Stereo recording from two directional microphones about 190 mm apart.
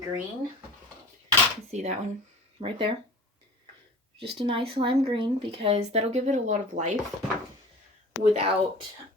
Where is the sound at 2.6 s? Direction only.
25° right (ahead or behind).